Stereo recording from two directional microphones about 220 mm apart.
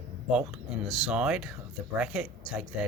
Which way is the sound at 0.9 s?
Centre (ahead or behind).